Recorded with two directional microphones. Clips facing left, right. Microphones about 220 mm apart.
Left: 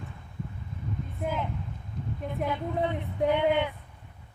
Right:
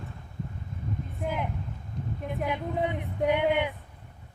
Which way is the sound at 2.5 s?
15° right (ahead or behind).